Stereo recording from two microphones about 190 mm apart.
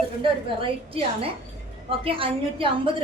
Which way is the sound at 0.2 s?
30° right (ahead or behind).